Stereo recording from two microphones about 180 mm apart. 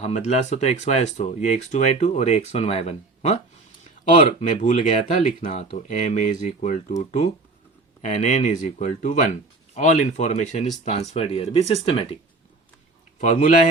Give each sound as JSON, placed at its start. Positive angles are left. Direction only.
{"t": 0.0, "sound": "speech", "side_deg": 40}
{"t": 4.0, "sound": "speech", "side_deg": 45}
{"t": 13.1, "sound": "a man's voice", "side_deg": 45}